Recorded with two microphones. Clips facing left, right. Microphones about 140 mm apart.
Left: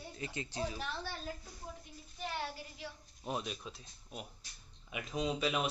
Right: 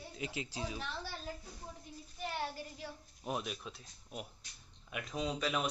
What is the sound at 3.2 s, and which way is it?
A man's voice, 5° right (ahead or behind).